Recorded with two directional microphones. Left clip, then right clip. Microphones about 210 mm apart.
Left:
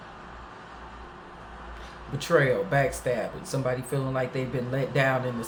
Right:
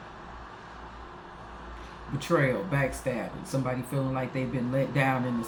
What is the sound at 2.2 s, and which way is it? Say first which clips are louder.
Speech: left 4 dB; 30° left (ahead or behind).